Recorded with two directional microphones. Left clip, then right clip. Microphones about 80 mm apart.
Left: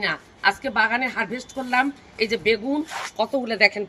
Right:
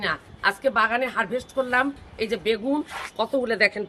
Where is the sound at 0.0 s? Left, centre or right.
Right.